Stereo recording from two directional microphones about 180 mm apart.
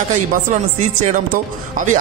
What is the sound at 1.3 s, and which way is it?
Speech, 50° right (ahead or behind).